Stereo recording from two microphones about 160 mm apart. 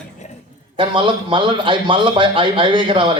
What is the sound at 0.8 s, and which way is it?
A man's voice, 30° right (ahead or behind).